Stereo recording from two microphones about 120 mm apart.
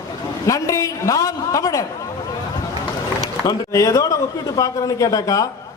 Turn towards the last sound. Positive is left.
turn(degrees=30)  # may be behind; listen again after turning